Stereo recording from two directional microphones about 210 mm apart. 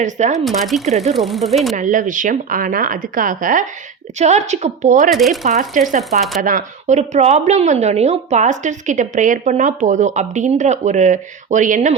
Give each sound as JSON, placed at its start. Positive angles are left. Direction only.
{"t": 0.0, "sound": "a woman's voice", "side_deg": -35}
{"t": 0.3, "sound": "speech", "side_deg": 0}
{"t": 0.9, "sound": "a woman's voice", "side_deg": -30}
{"t": 1.1, "sound": "speech", "side_deg": 0}
{"t": 1.7, "sound": "a woman's voice", "side_deg": -35}
{"t": 5.1, "sound": "speech", "side_deg": 0}
{"t": 5.5, "sound": "a woman's voice", "side_deg": -35}
{"t": 6.0, "sound": "speech", "side_deg": 0}
{"t": 6.4, "sound": "a woman's voice", "side_deg": -40}